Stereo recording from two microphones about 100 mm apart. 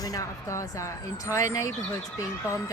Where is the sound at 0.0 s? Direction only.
35° left (ahead or behind).